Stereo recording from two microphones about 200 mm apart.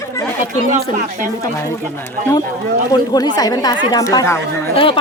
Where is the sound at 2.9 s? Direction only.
20° left (ahead or behind).